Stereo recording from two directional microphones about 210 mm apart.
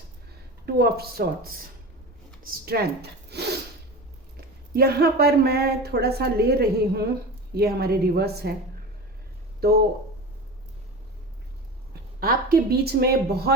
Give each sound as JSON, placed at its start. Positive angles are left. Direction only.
{"t": 0.6, "sound": "a man's voice", "side_deg": -50}
{"t": 3.2, "sound": "a sound", "side_deg": -50}
{"t": 4.4, "sound": "a man's voice", "side_deg": -45}
{"t": 9.6, "sound": "a man's voice", "side_deg": -50}
{"t": 12.2, "sound": "a man's voice", "side_deg": -45}